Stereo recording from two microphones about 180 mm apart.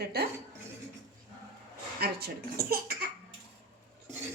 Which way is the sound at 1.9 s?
60° right (ahead or behind).